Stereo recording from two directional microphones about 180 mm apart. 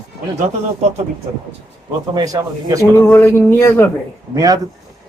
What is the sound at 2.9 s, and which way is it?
Speech, 15° left (ahead or behind).